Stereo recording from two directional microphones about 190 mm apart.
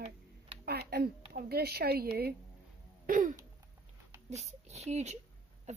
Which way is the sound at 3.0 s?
45° right (ahead or behind).